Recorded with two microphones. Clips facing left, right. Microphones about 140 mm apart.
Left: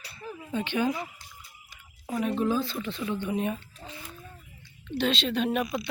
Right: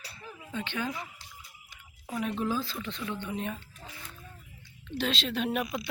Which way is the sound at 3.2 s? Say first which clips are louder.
Left 7 dB; 10° left (ahead or behind).